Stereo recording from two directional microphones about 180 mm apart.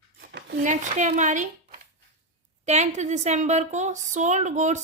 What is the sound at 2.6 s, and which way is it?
A woman's voice, 40° right (ahead or behind).